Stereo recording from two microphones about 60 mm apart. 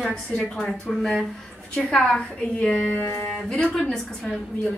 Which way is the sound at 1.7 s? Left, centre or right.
Centre.